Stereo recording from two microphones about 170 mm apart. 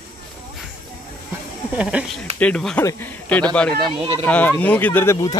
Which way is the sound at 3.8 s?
35° right (ahead or behind).